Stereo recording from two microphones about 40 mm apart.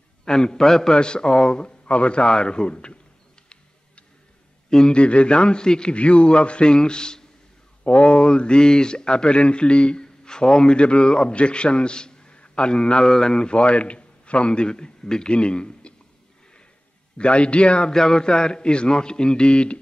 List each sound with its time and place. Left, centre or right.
0.2 s a man's voice: centre
4.6 s a man's voice: centre
4.9 s speech: left
7.8 s a man's voice: left
17.2 s speech: left
17.9 s speech: centre